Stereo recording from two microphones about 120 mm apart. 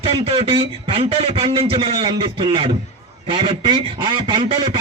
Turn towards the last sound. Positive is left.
turn(degrees=-45)  # may be behind; listen again after turning